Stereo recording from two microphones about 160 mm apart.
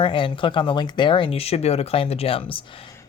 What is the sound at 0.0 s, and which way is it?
Speech, 30° left (ahead or behind).